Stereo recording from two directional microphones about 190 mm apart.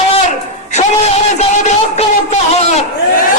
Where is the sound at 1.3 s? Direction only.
35° left (ahead or behind).